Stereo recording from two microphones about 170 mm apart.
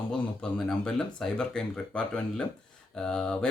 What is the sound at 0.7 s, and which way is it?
Speech, 5° left (ahead or behind).